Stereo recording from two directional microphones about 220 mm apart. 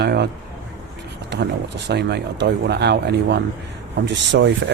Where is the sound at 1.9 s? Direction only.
50° right (ahead or behind).